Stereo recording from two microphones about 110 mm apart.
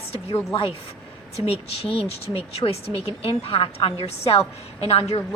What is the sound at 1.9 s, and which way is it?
Speech, 55° left (ahead or behind).